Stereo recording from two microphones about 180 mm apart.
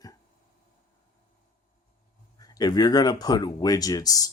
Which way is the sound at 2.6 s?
20° left (ahead or behind).